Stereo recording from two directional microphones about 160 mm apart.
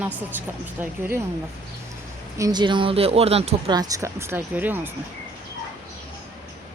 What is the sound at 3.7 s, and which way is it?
A woman's voice, 25° right (ahead or behind).